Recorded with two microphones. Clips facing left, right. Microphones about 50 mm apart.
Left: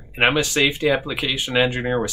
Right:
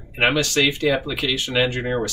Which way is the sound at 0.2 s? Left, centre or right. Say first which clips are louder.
Left 1 dB; left.